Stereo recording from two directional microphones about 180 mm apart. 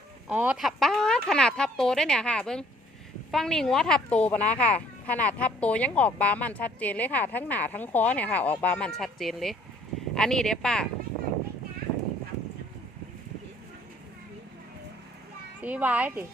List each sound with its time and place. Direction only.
0.3 s a woman's voice: 5° right (ahead or behind)
15.6 s a child's voice: 10° right (ahead or behind)